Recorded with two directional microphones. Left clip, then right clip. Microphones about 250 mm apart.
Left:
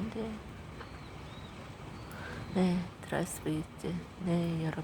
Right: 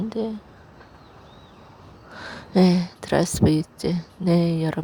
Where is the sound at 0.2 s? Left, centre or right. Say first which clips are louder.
Right 13 dB; right.